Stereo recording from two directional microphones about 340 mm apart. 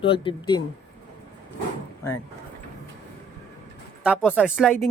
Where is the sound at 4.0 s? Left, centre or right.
Centre.